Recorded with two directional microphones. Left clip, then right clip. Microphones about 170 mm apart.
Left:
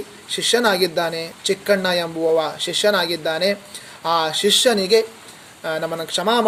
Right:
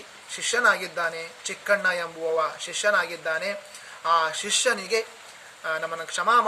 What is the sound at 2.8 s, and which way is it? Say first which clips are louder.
Speech: left 5 dB; 15° right (ahead or behind).